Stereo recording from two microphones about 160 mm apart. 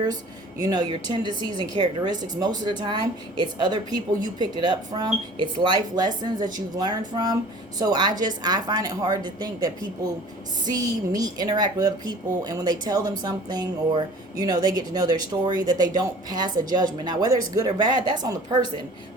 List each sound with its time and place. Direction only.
0.6 s speech: 25° right (ahead or behind)